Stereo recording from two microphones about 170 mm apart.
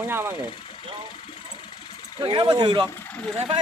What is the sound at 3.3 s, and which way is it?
Speech, 35° right (ahead or behind).